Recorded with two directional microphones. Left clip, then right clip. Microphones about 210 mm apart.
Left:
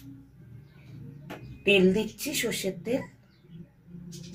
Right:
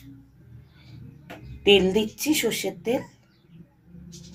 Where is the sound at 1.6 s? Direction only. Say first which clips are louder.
Right 4 dB; 40° right (ahead or behind).